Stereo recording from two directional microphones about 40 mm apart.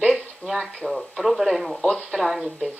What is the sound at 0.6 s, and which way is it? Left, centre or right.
Speech, centre.